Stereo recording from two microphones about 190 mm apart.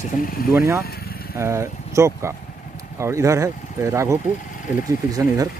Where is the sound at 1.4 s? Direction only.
15° right (ahead or behind).